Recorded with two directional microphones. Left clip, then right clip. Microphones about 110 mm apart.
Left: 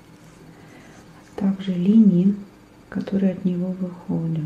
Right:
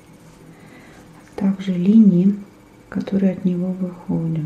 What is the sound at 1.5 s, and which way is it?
Speech, 20° right (ahead or behind).